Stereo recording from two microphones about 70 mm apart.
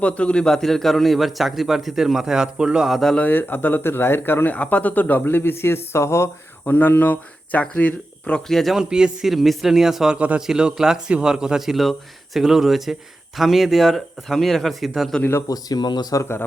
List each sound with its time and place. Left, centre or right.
0.0 s speech: centre
3.2 s speech: left
6.7 s speech: left
8.4 s speech: centre
8.8 s a man's voice: centre
10.2 s a man's voice: centre
15.2 s speech: left
15.4 s speech: left